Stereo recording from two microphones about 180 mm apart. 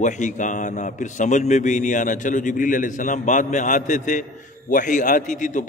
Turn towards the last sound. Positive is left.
turn(degrees=45)  # may be behind; listen again after turning